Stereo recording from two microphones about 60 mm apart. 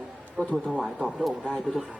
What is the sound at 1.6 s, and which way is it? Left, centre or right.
Speech, centre.